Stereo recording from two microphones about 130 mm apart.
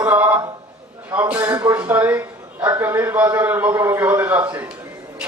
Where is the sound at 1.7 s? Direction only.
10° right (ahead or behind).